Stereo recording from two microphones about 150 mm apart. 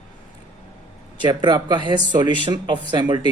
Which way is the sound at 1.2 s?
30° right (ahead or behind).